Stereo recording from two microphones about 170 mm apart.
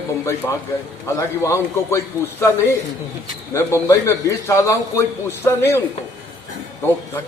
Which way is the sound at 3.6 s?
15° left (ahead or behind).